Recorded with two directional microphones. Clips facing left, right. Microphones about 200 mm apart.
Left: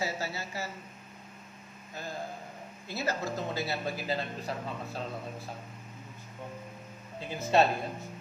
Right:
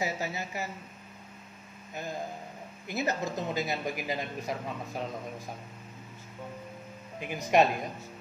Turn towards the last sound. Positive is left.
turn(degrees=-15)  # may be behind; listen again after turning